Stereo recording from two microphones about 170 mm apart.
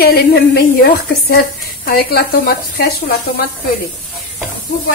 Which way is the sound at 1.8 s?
65° left (ahead or behind).